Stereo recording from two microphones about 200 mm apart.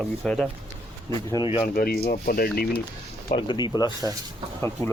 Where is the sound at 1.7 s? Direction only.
50° left (ahead or behind).